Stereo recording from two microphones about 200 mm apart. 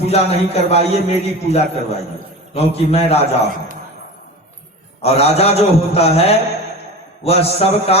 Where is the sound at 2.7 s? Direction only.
30° left (ahead or behind).